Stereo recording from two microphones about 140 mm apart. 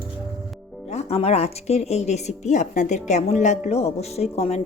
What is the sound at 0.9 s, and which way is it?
A woman's voice, 45° left (ahead or behind).